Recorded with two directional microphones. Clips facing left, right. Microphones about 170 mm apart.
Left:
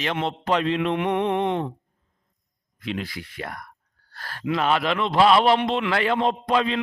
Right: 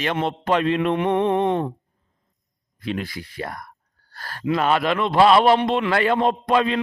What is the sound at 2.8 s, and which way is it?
A man's voice, 45° right (ahead or behind).